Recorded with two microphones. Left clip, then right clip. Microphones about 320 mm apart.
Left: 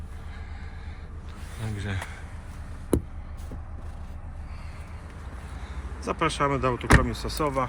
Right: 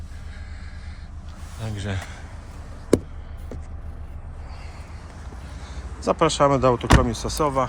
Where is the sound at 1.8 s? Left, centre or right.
Centre.